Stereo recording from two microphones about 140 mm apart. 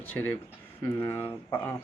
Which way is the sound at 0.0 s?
15° left (ahead or behind).